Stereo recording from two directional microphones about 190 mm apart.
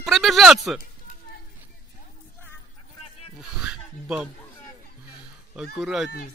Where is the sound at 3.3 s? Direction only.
5° right (ahead or behind).